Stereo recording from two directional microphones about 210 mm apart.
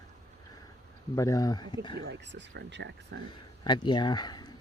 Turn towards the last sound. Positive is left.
turn(degrees=20)  # may be behind; listen again after turning